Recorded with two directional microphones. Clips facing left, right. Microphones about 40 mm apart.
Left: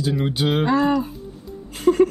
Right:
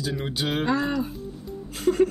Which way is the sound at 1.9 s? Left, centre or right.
Left.